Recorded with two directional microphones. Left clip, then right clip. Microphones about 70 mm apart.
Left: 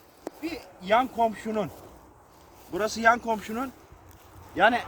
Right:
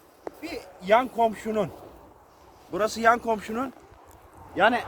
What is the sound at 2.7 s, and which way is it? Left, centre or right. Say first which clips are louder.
Speech: right 1 dB; right.